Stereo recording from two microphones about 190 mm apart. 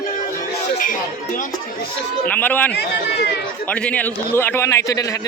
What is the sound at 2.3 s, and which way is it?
Speech, 10° left (ahead or behind).